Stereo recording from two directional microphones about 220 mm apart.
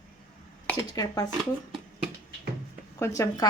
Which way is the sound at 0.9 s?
15° left (ahead or behind).